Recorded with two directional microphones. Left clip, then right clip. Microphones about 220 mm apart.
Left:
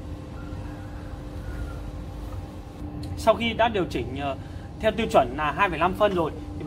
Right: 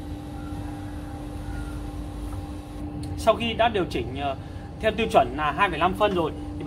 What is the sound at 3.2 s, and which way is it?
A man's voice, 20° left (ahead or behind).